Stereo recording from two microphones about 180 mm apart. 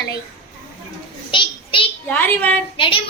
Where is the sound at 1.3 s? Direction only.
30° left (ahead or behind).